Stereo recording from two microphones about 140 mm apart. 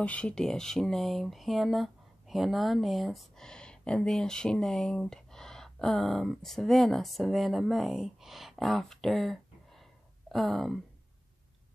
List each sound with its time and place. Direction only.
0.0 s speech: 10° left (ahead or behind)